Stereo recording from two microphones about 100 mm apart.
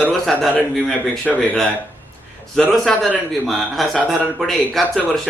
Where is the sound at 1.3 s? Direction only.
Centre (ahead or behind).